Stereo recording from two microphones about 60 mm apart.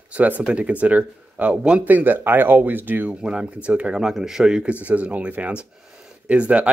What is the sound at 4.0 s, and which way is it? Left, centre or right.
Speech, centre.